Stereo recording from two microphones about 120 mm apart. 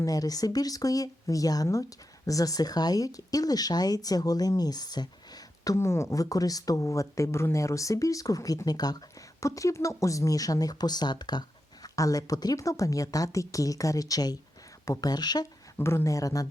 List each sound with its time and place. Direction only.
0.0 s speech: 30° left (ahead or behind)
15.8 s speech: 20° left (ahead or behind)